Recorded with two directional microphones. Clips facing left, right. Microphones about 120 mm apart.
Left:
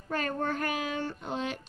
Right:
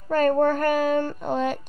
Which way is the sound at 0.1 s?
45° right (ahead or behind).